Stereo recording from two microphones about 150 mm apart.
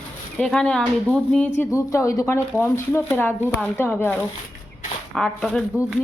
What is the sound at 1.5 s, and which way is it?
Speech, 20° left (ahead or behind).